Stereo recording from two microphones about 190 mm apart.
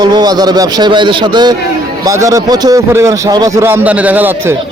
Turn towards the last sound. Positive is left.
turn(degrees=-10)  # may be behind; listen again after turning